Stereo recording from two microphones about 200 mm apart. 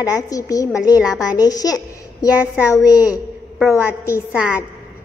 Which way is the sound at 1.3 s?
20° left (ahead or behind).